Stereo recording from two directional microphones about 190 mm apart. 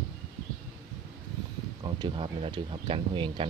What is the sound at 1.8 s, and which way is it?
Speech, 25° right (ahead or behind).